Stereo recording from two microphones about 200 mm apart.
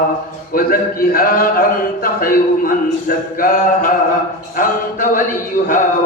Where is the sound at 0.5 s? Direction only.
45° left (ahead or behind).